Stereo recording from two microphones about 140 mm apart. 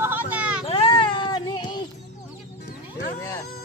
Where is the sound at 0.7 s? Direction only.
40° left (ahead or behind).